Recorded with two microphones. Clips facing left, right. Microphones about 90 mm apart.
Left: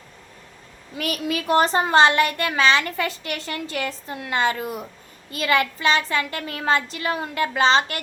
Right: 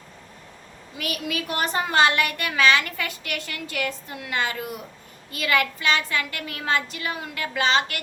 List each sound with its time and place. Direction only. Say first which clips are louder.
0.9 s a woman's voice: left 4 dB; 35° left (ahead or behind)